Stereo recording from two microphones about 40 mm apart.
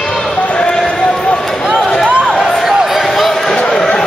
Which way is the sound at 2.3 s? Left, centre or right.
Centre.